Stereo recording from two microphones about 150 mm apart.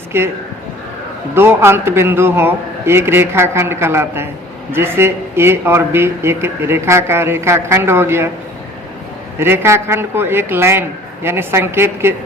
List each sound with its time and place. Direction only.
0.1 s speech: 15° right (ahead or behind)
1.4 s speech: 15° right (ahead or behind)
9.4 s speech: 15° right (ahead or behind)